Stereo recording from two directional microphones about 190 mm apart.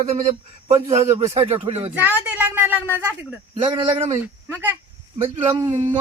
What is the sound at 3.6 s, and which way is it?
Speech, 30° right (ahead or behind).